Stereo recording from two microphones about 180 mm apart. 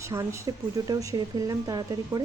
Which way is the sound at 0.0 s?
15° right (ahead or behind).